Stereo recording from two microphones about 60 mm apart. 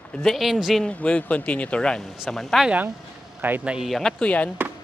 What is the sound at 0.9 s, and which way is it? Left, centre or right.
Speech, left.